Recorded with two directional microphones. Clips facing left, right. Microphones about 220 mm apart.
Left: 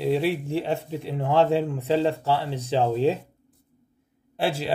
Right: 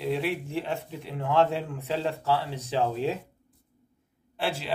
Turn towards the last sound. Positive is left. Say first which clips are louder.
# left 5 dB
turn(degrees=40)  # may be behind; listen again after turning